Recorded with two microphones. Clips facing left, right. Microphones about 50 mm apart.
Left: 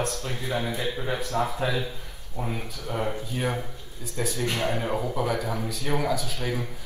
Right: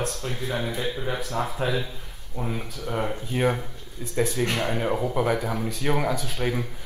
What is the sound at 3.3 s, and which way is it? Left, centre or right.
Speech, right.